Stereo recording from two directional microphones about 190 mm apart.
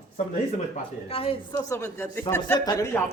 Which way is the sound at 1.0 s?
30° left (ahead or behind).